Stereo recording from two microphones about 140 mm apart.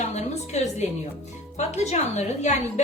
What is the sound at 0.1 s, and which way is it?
Music, 50° left (ahead or behind).